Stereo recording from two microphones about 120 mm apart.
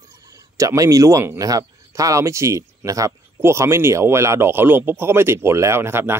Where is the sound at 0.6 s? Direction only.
25° right (ahead or behind).